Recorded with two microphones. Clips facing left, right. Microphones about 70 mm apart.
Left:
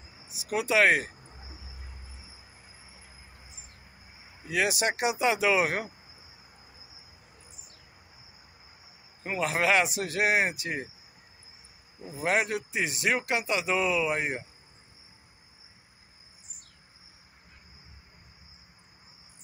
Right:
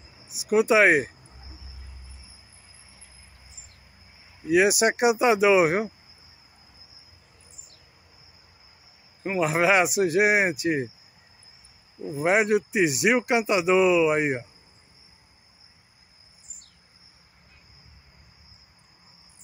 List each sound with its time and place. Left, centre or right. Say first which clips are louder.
0.3 s speech: right 8 dB; centre
1.2 s cricket: left 1 dB; left
4.5 s speech: right 8 dB; centre
9.2 s speech: right 5 dB; centre
12.1 s speech: right 6 dB; right